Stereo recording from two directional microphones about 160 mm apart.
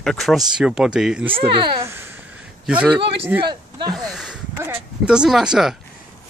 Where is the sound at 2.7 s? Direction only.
5° right (ahead or behind).